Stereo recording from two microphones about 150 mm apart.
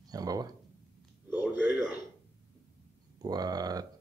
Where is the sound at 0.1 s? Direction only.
25° right (ahead or behind).